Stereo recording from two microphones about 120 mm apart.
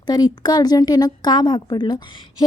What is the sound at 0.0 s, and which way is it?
A woman's voice, 35° left (ahead or behind).